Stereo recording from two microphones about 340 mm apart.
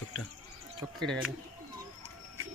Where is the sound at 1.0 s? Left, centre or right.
Centre.